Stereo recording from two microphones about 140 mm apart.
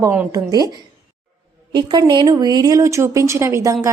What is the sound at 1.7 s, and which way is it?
A woman's voice, 30° right (ahead or behind).